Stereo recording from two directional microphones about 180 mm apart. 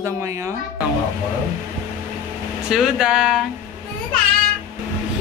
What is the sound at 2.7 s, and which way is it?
Speech, 5° right (ahead or behind).